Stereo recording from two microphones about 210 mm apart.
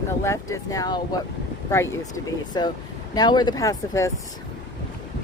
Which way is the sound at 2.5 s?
20° left (ahead or behind).